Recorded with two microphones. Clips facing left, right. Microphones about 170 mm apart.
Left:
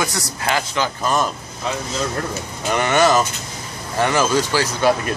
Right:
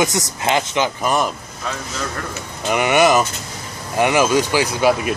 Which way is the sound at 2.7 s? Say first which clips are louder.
Right 2 dB; 10° right (ahead or behind).